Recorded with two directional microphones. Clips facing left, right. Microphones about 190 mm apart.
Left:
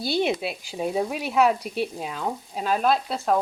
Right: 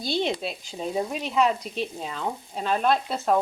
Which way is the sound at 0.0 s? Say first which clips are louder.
Left 2 dB; 10° left (ahead or behind).